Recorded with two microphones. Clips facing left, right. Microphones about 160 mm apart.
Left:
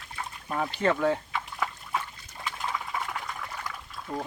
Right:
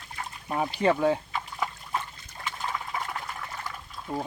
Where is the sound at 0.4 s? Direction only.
15° right (ahead or behind).